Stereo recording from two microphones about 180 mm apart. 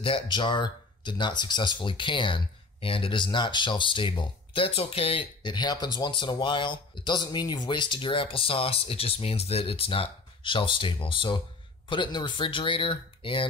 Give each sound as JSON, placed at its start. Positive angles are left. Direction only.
{"t": 0.0, "sound": "speech", "side_deg": 30}